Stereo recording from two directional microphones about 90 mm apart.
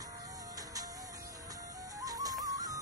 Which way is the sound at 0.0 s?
40° right (ahead or behind).